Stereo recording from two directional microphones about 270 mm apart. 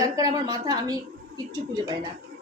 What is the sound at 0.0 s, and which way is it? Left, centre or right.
Speech, centre.